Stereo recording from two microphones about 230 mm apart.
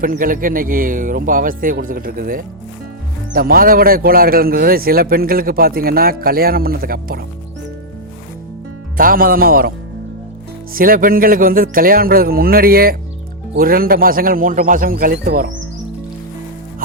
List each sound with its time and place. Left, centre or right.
0.0 s a man's voice: right
9.0 s a man's voice: right
10.8 s a man's voice: right